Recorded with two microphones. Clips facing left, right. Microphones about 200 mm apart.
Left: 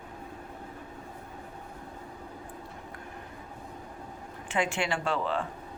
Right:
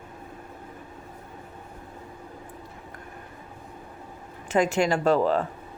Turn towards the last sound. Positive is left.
turn(degrees=-40)  # may be behind; listen again after turning